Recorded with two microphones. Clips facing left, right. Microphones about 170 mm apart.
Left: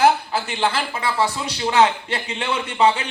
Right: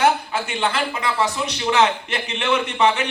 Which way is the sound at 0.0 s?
30° left (ahead or behind).